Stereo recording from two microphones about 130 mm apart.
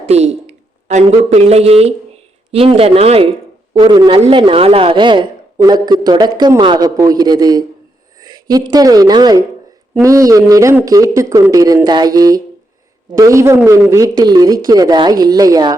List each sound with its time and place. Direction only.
0.0 s a woman's voice: 55° right (ahead or behind)
3.8 s a woman's voice: 35° right (ahead or behind)